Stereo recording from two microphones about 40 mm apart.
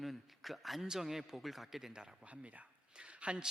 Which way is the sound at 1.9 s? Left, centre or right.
Centre.